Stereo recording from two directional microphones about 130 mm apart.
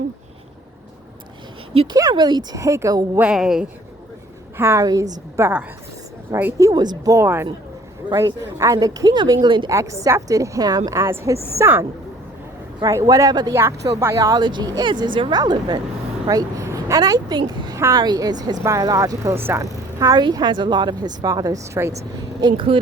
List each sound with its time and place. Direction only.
1.7 s speech: 45° right (ahead or behind)
2.0 s a woman's voice: 30° right (ahead or behind)
3.2 s a woman's voice: 5° right (ahead or behind)
4.5 s a woman's voice: 15° right (ahead or behind)
4.8 s a woman's voice: 30° right (ahead or behind)
5.4 s a woman's voice: 15° right (ahead or behind); by 9.6 s 35° right (ahead or behind)
9.6 s a woman's voice: 25° right (ahead or behind)
21.6 s a woman's voice: 20° right (ahead or behind)
22.4 s speech: 35° right (ahead or behind)